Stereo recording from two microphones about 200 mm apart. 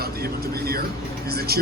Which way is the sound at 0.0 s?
50° right (ahead or behind).